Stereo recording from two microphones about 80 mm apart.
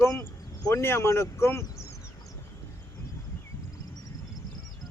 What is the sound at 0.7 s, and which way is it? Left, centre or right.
Speech, left.